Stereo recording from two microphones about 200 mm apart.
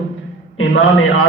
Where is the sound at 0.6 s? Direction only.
80° left.